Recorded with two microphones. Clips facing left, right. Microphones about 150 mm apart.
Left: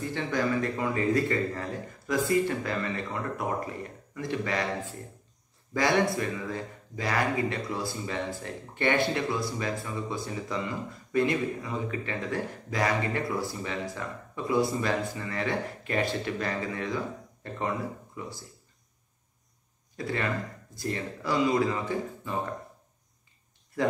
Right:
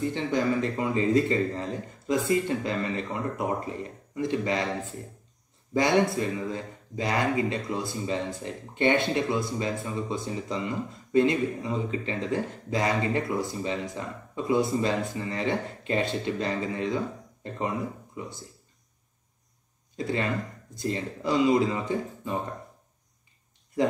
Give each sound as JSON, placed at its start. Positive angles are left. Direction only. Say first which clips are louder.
{"t": 0.1, "sound": "speech", "louder": "right 2 dB", "side_deg": -20}
{"t": 20.0, "sound": "speech", "louder": "right 2 dB", "side_deg": -20}